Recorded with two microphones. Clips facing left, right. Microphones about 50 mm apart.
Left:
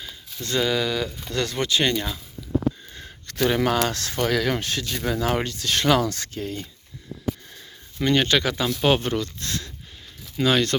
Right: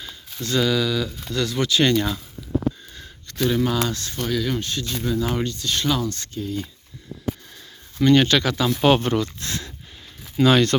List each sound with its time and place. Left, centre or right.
0.4 s speech: left
1.8 s speech: centre
3.2 s speech: left
3.8 s speech: left
8.0 s speech: centre
8.8 s speech: centre
10.3 s speech: centre